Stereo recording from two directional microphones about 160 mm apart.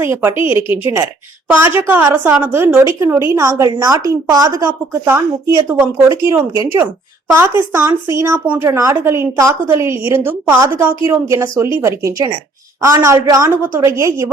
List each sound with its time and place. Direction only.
0.0 s a woman's voice: 15° right (ahead or behind)